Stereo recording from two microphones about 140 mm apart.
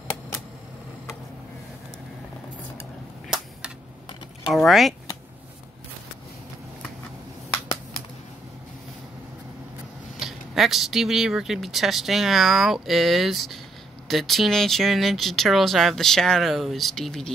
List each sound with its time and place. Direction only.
4.5 s speech: centre (ahead or behind)
10.1 s speech: centre (ahead or behind)